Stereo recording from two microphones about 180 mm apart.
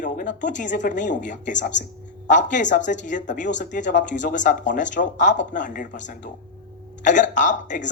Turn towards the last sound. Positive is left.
turn(degrees=45)  # may be behind; listen again after turning